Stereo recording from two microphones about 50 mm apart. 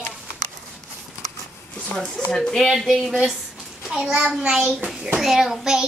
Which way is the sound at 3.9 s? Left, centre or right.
Centre.